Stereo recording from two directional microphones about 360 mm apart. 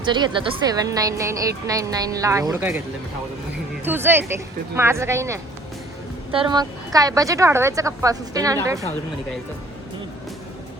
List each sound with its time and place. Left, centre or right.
0.0 s a woman's voice: centre
3.8 s a woman's voice: centre